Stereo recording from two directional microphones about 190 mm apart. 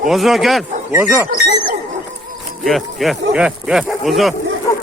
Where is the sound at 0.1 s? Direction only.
Centre (ahead or behind).